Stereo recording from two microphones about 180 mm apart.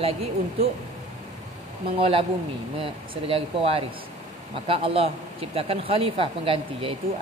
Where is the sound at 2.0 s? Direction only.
30° right (ahead or behind).